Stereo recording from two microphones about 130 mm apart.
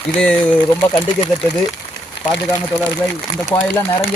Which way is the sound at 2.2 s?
90° left.